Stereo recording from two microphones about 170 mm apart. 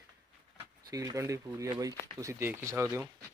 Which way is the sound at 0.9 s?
20° right (ahead or behind).